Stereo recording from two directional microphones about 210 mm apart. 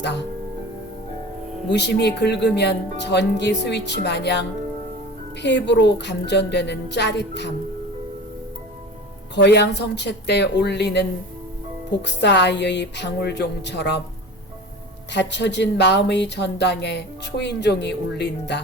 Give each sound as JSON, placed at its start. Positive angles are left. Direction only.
{"t": 1.7, "sound": "speech", "side_deg": 55}
{"t": 5.4, "sound": "speech", "side_deg": 55}
{"t": 9.3, "sound": "speech", "side_deg": 55}
{"t": 15.1, "sound": "speech", "side_deg": 55}